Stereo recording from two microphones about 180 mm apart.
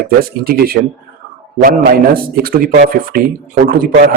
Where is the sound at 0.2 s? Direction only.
55° right (ahead or behind).